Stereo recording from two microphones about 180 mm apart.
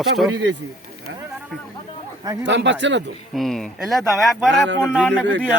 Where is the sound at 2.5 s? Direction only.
85° right.